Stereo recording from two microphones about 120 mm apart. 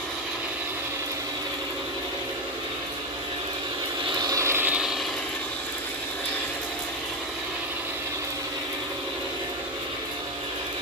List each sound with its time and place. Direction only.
4.3 s vehicle: 25° right (ahead or behind); by 4.9 s 10° right (ahead or behind)